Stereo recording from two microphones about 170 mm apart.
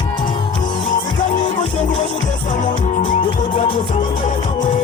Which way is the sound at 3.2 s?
30° left (ahead or behind).